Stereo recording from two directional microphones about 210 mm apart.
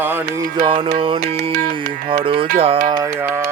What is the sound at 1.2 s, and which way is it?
Music, 45° right (ahead or behind).